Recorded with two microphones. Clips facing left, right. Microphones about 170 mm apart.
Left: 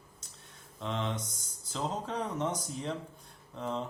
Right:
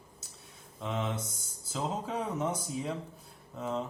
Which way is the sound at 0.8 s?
5° right (ahead or behind).